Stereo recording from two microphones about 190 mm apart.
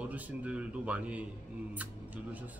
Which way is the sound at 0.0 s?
10° right (ahead or behind).